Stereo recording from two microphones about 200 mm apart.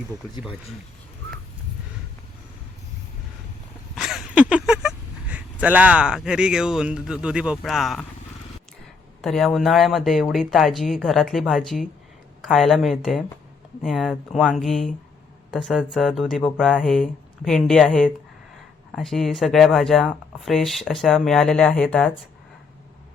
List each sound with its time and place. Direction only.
3.9 s speech: centre (ahead or behind)
9.2 s speech: centre (ahead or behind)